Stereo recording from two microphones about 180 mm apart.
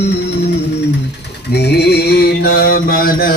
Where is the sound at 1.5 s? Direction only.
65° left (ahead or behind).